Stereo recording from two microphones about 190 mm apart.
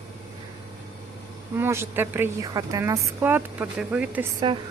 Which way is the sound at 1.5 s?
15° right (ahead or behind).